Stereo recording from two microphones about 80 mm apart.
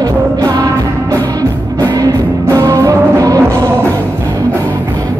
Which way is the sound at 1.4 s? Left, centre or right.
Right.